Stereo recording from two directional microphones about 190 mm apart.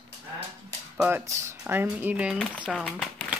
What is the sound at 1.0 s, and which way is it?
Speech, 10° right (ahead or behind).